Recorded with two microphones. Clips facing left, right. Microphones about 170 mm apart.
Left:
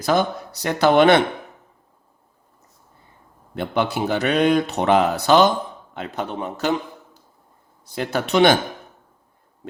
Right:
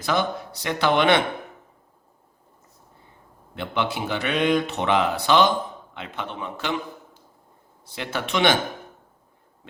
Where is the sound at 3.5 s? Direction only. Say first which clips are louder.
Left 4 dB; 40° left (ahead or behind).